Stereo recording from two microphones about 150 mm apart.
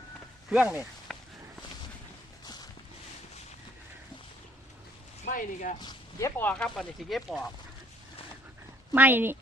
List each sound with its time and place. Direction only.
0.5 s speech: 10° right (ahead or behind)
1.1 s walk: centre (ahead or behind)
5.2 s speech: 60° left (ahead or behind)
5.8 s speech: 20° left (ahead or behind); by 7.4 s centre (ahead or behind)
8.9 s speech: 15° right (ahead or behind)